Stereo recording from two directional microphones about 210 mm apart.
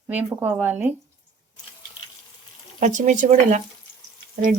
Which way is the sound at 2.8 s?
35° right (ahead or behind).